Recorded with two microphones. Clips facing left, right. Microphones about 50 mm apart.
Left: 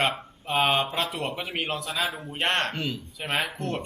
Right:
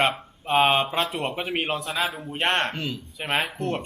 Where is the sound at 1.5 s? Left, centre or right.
Centre.